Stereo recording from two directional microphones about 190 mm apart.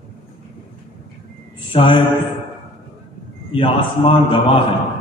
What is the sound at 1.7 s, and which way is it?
Speech, 25° left (ahead or behind).